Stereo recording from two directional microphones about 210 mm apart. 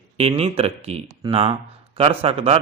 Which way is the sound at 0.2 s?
30° right (ahead or behind).